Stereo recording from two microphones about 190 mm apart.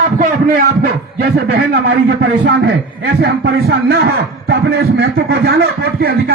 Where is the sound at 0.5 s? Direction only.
55° right (ahead or behind).